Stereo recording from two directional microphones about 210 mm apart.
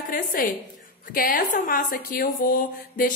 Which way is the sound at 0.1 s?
40° left (ahead or behind).